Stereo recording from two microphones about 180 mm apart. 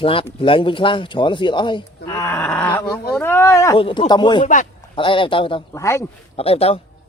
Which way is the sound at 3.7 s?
30° left (ahead or behind).